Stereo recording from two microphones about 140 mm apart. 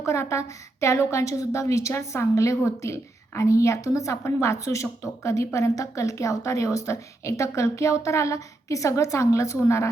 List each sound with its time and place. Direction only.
0.0 s a woman's voice: 20° left (ahead or behind)